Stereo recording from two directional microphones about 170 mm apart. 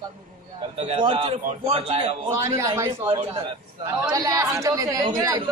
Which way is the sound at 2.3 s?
15° right (ahead or behind).